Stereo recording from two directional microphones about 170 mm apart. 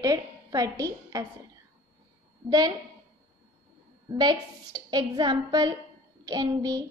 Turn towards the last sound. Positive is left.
turn(degrees=-20)  # may be behind; listen again after turning